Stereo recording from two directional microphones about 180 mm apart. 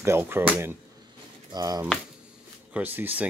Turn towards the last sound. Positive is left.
turn(degrees=-10)  # may be behind; listen again after turning